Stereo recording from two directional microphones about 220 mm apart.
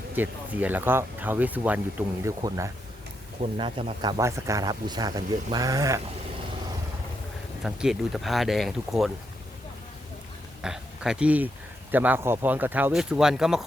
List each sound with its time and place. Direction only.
0.2 s speech: 10° right (ahead or behind)
3.4 s speech: 25° right (ahead or behind)
4.2 s speech: 15° right (ahead or behind)
7.6 s speech: centre (ahead or behind)
10.6 s speech: 5° right (ahead or behind)